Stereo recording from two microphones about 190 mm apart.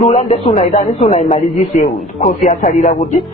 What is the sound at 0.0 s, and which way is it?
A man's voice, 35° left (ahead or behind).